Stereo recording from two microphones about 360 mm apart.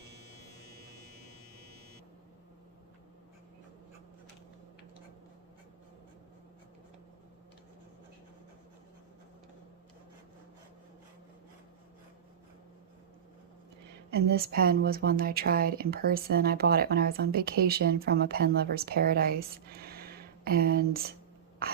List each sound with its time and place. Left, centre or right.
14.1 s speech: right